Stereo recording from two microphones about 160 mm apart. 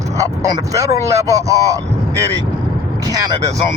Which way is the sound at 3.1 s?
20° right (ahead or behind).